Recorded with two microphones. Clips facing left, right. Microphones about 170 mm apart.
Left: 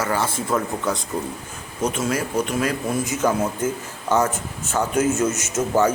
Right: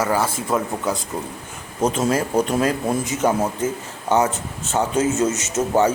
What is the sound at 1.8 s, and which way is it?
Speech, 30° right (ahead or behind).